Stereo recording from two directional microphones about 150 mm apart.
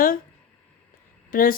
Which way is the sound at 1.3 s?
70° left (ahead or behind).